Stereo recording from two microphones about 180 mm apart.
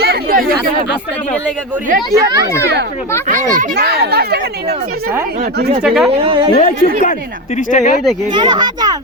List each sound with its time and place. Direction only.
0.0 s chatter: 55° right (ahead or behind)
2.1 s speech: 20° right (ahead or behind)
2.5 s speech: 15° left (ahead or behind)
3.5 s speech: 55° right (ahead or behind)
5.8 s speech: centre (ahead or behind)
6.1 s a woman's voice: 30° right (ahead or behind)
6.8 s speech: 50° left (ahead or behind)
8.3 s speech: 25° right (ahead or behind)